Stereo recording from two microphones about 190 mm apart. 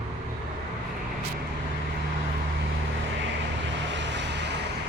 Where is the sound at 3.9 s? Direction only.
70° right (ahead or behind).